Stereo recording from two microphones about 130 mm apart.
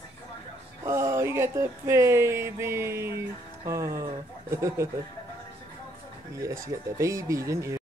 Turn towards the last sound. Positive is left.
turn(degrees=-25)  # may be behind; listen again after turning